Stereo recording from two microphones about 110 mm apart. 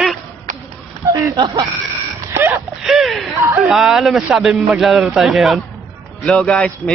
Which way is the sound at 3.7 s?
5° right (ahead or behind).